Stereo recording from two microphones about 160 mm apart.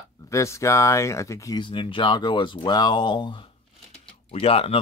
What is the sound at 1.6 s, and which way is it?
Speech, 30° left (ahead or behind).